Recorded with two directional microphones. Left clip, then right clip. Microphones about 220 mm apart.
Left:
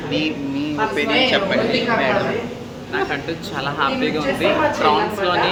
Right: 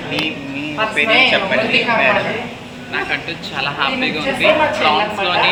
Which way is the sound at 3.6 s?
15° left (ahead or behind).